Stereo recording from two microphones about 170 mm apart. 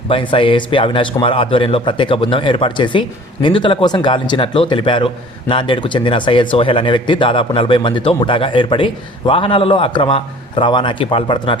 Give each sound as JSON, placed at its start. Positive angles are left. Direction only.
{"t": 0.1, "sound": "a man's voice", "side_deg": 30}